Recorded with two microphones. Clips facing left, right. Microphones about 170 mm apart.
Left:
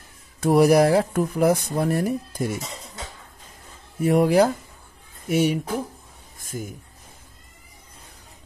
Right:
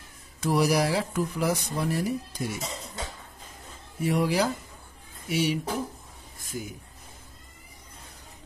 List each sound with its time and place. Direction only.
0.4 s speech: 55° left (ahead or behind)
4.0 s speech: 55° left (ahead or behind)